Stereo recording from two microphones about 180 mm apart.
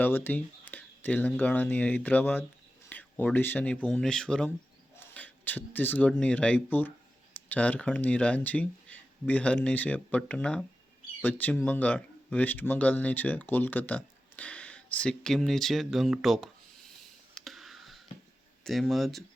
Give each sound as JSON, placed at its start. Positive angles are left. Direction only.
{"t": 0.0, "sound": "speech", "side_deg": 10}
{"t": 17.3, "sound": "a sound", "side_deg": 0}
{"t": 18.6, "sound": "speech", "side_deg": 0}